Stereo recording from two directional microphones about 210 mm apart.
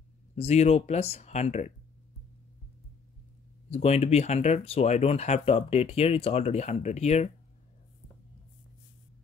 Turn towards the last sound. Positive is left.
turn(degrees=30)  # may be behind; listen again after turning